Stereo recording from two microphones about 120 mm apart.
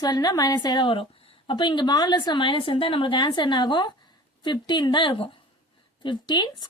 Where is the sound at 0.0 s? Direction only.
35° left (ahead or behind).